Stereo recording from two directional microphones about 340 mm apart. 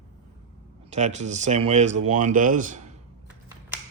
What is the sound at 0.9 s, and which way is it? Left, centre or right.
Speech, right.